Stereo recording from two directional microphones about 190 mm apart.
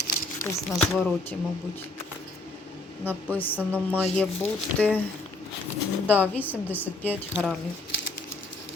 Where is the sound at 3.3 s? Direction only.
10° left (ahead or behind).